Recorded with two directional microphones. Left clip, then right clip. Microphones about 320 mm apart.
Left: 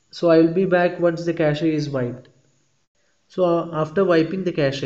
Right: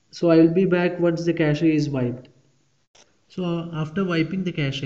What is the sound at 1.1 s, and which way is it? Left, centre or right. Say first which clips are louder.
A man's voice: left 1 dB; centre.